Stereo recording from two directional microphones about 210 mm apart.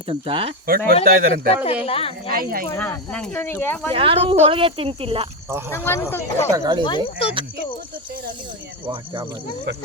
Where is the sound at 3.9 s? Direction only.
25° right (ahead or behind).